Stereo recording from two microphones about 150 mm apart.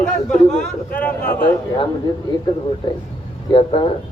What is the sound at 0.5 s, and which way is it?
Speech, 10° left (ahead or behind).